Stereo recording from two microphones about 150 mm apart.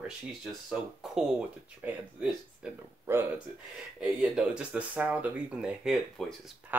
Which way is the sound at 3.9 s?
5° right (ahead or behind).